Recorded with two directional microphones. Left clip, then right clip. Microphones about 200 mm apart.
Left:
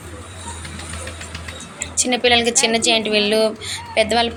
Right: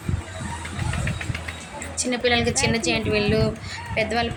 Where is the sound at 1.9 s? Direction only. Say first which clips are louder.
Left 6 dB; 10° left (ahead or behind).